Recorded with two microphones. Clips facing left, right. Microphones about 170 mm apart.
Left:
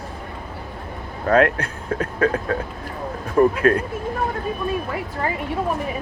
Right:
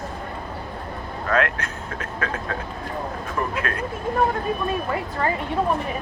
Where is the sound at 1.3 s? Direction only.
35° left (ahead or behind).